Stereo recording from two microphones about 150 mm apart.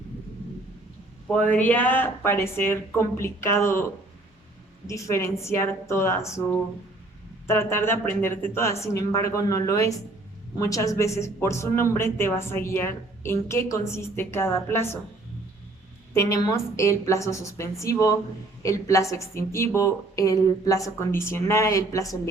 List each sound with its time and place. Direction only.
1.5 s speech: 10° left (ahead or behind)
4.9 s a woman's voice: 20° left (ahead or behind)
16.1 s a woman's voice: 20° left (ahead or behind)